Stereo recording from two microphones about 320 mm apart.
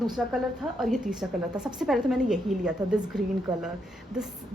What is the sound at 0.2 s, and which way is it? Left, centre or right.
A woman's voice, centre.